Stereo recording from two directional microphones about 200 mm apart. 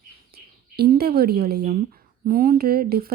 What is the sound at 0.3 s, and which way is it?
Speech, 55° right (ahead or behind).